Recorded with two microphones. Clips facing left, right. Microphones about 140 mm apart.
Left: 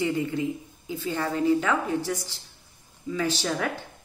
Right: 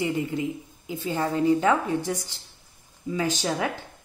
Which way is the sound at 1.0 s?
20° right (ahead or behind).